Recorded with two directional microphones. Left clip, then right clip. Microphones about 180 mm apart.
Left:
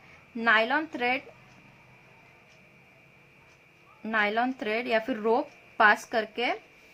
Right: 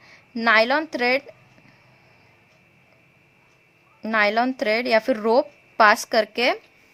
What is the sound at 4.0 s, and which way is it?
Speech, 45° right (ahead or behind).